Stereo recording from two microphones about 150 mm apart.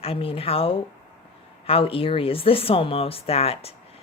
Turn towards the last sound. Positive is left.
turn(degrees=40)  # may be behind; listen again after turning